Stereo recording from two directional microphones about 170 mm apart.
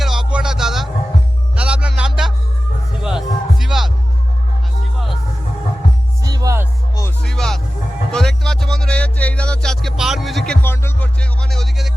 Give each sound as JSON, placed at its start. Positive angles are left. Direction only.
{"t": 0.0, "sound": "music", "side_deg": 0}
{"t": 6.2, "sound": "music", "side_deg": -20}
{"t": 7.2, "sound": "music", "side_deg": 5}